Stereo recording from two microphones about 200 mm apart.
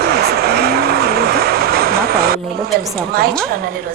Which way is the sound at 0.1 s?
50° right (ahead or behind).